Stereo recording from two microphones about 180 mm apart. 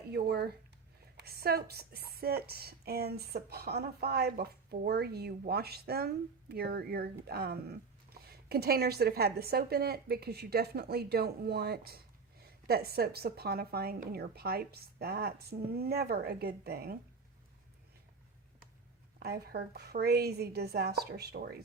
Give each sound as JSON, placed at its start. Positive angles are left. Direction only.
{"t": 0.1, "sound": "a woman's voice", "side_deg": -65}
{"t": 19.2, "sound": "a woman's voice", "side_deg": -60}